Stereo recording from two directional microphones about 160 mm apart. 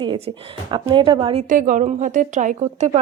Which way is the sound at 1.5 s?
55° right (ahead or behind).